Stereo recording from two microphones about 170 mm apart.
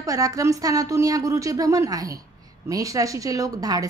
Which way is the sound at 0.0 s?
20° right (ahead or behind).